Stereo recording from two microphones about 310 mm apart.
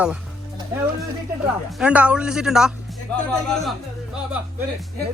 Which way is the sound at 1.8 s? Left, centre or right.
Centre.